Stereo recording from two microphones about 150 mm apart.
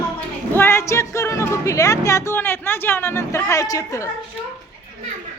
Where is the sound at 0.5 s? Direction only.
15° left (ahead or behind).